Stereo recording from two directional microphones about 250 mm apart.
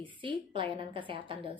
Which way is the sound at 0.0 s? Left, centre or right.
Right.